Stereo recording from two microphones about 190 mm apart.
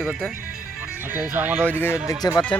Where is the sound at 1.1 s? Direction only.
5° right (ahead or behind).